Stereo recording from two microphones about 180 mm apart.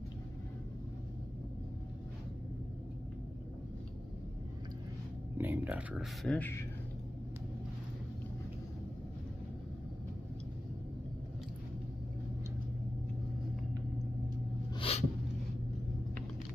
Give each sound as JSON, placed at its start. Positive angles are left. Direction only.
{"t": 5.4, "sound": "speech", "side_deg": -10}
{"t": 6.3, "sound": "speech", "side_deg": 10}
{"t": 14.7, "sound": "a sound", "side_deg": 30}